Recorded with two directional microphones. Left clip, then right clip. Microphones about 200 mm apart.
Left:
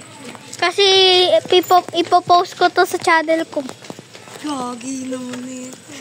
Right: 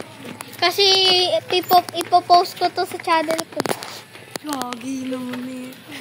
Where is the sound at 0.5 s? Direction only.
30° left (ahead or behind); by 3.2 s 50° left (ahead or behind).